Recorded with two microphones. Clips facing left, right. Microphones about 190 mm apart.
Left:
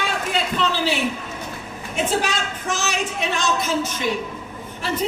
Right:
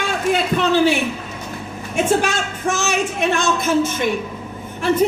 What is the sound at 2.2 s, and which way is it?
A woman's voice, 50° right (ahead or behind).